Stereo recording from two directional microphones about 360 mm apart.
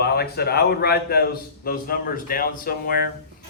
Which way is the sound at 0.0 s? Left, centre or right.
Left.